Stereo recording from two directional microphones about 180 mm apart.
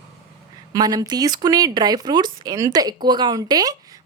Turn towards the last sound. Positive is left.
turn(degrees=-20)  # may be behind; listen again after turning